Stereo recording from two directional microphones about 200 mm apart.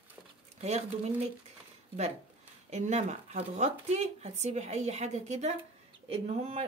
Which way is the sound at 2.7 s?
35° right (ahead or behind).